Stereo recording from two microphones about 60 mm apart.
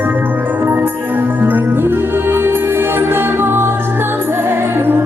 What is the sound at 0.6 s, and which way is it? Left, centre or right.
Music, right.